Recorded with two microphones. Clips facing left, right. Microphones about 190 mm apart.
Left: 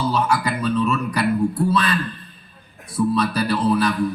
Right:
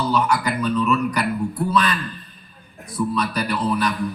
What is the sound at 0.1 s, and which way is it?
Speech, 30° left (ahead or behind).